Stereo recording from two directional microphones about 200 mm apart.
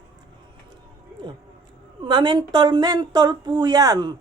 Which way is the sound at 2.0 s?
20° right (ahead or behind).